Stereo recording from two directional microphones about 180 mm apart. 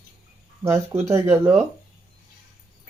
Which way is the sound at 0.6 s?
15° right (ahead or behind).